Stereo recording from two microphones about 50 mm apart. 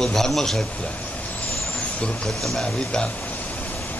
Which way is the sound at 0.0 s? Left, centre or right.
Centre.